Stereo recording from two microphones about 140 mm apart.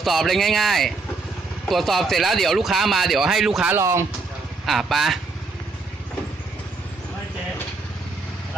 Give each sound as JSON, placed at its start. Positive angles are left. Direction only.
{"t": 0.0, "sound": "speech", "side_deg": 0}
{"t": 3.8, "sound": "speech", "side_deg": -20}
{"t": 4.6, "sound": "speech", "side_deg": 0}